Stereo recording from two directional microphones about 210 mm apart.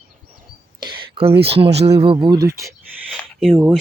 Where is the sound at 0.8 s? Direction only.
25° right (ahead or behind).